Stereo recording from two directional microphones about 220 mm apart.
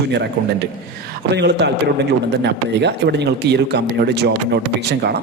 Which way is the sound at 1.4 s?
50° right (ahead or behind).